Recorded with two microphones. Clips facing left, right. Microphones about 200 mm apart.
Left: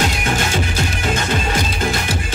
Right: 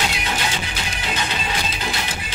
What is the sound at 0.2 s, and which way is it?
Music, 50° left (ahead or behind).